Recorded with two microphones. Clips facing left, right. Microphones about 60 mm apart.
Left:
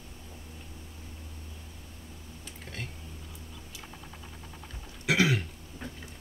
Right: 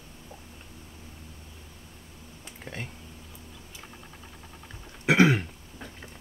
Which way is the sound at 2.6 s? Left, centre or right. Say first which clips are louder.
Right 3 dB; centre.